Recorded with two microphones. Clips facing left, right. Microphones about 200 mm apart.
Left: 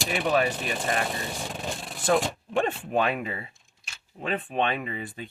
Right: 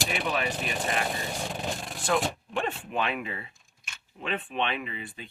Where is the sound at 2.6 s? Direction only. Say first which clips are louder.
Left 5 dB; 40° left (ahead or behind).